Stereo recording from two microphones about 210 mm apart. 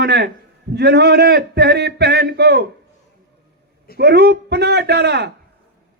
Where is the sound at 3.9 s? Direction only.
50° right (ahead or behind).